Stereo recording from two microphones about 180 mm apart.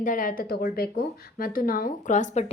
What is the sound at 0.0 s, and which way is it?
A woman's voice, 50° left (ahead or behind).